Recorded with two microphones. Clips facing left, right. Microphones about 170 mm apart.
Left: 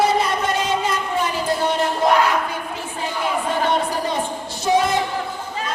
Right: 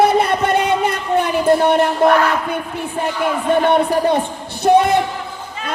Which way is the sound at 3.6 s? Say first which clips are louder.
Right 6 dB; 60° right (ahead or behind).